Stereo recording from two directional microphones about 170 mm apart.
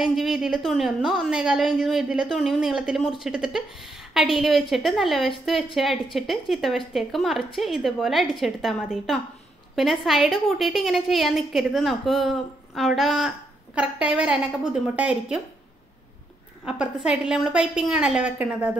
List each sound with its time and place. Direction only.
0.0 s a woman's voice: centre (ahead or behind)
16.6 s a woman's voice: 5° right (ahead or behind)